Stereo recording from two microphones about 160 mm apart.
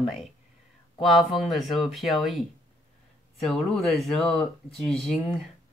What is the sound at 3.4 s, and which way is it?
Speech, centre (ahead or behind).